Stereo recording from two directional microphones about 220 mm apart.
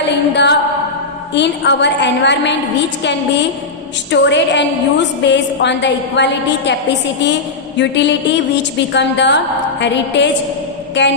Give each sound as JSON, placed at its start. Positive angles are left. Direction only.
{"t": 0.0, "sound": "a sound", "side_deg": 50}
{"t": 1.3, "sound": "a woman's voice", "side_deg": 50}
{"t": 4.1, "sound": "a woman's voice", "side_deg": 55}
{"t": 7.8, "sound": "a woman's voice", "side_deg": 55}